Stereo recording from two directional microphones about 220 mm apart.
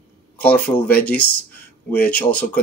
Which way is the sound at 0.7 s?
20° left (ahead or behind).